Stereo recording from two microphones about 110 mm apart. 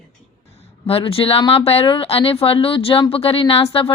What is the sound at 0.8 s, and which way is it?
Speech, 60° left (ahead or behind).